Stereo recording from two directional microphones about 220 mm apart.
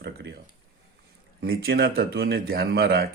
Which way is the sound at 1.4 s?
45° right (ahead or behind).